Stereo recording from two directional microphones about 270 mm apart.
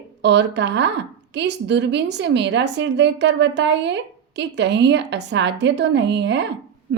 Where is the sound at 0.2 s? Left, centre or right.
Right.